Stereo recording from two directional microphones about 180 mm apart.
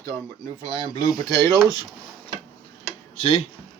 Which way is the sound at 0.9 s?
20° left (ahead or behind).